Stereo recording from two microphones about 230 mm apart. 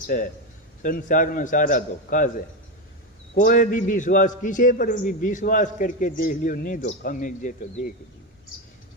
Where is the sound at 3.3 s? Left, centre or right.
Left.